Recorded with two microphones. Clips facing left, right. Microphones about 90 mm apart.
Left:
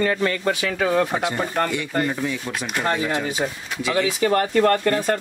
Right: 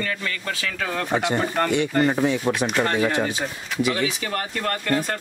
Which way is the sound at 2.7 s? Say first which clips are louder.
Left 3 dB; 10° left (ahead or behind).